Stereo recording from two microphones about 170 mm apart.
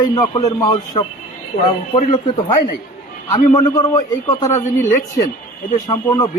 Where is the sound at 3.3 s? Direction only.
25° left (ahead or behind).